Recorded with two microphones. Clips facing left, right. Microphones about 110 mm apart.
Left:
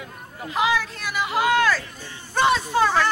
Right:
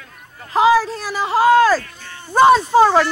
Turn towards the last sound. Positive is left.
turn(degrees=-35)  # may be behind; listen again after turning